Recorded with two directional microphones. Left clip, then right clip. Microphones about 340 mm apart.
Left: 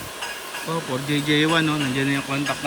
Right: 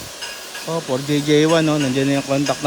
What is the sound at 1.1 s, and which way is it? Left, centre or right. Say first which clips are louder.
Speech: right 5 dB; centre.